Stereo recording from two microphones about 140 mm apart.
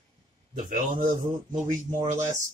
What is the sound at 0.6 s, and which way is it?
Speech, 65° right (ahead or behind).